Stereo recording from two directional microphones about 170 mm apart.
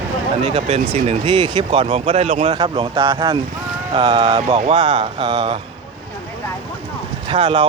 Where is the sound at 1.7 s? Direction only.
40° right (ahead or behind).